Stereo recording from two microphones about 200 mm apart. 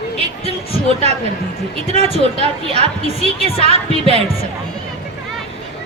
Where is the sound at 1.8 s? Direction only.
35° right (ahead or behind).